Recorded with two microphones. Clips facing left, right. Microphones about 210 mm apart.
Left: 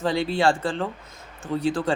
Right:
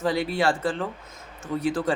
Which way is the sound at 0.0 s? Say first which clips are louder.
Left 2 dB; 25° left (ahead or behind).